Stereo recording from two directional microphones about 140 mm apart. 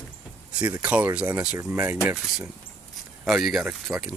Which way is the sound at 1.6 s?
20° right (ahead or behind).